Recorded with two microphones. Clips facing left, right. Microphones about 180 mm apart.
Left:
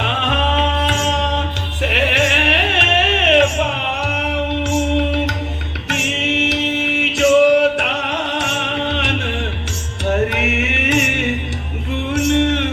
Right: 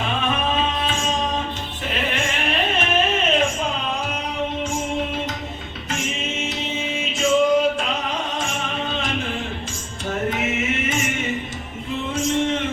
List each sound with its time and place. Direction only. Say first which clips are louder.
0.0 s music: left 3 dB; 70° left (ahead or behind)
5.9 s mantra: left 6 dB; 75° left (ahead or behind)
10.1 s music: left 6 dB; 70° left (ahead or behind)